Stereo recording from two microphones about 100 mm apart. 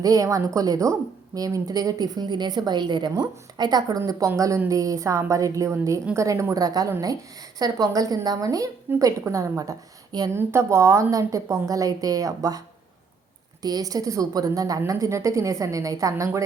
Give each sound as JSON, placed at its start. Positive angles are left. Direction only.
{"t": 0.0, "sound": "a woman's voice", "side_deg": -35}
{"t": 10.3, "sound": "a woman's voice", "side_deg": -25}